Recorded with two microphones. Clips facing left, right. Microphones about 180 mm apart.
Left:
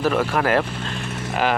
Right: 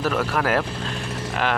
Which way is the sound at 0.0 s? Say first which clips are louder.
Left 3 dB; centre (ahead or behind).